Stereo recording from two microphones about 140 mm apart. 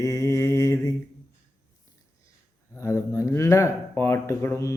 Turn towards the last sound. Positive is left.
turn(degrees=20)  # may be behind; listen again after turning